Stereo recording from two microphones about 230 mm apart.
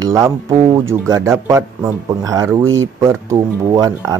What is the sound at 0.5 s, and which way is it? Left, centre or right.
A man's voice, right.